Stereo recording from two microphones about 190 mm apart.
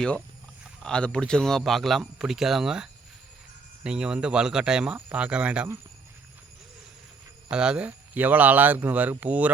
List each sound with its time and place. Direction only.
0.8 s a man's voice: 5° left (ahead or behind)
7.5 s speech: 5° right (ahead or behind)